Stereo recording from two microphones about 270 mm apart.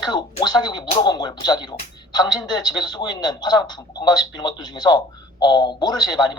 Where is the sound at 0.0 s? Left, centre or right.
Centre.